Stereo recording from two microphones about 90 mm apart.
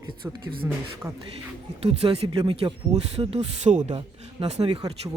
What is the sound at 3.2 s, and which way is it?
Speech, 60° right (ahead or behind).